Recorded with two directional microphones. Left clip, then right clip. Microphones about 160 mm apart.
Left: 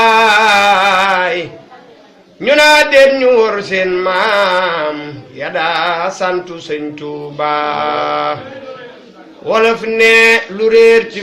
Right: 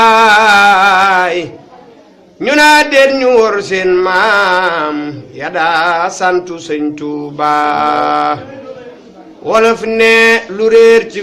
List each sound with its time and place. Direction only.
0.0 s music: 15° right (ahead or behind)
2.4 s a man's voice: 15° right (ahead or behind)
9.5 s a man's voice: 15° right (ahead or behind)